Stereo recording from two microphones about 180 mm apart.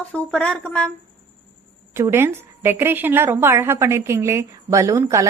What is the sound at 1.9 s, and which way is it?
A woman's voice, 15° right (ahead or behind).